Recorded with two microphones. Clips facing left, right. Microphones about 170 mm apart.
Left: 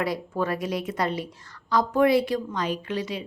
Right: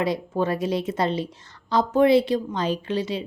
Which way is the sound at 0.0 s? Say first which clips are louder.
Right 3 dB; 25° right (ahead or behind).